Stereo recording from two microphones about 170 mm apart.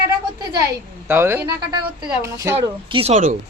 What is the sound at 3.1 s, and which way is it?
Speech, 50° right (ahead or behind).